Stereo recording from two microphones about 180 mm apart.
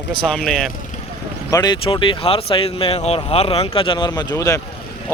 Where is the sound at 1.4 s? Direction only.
20° left (ahead or behind).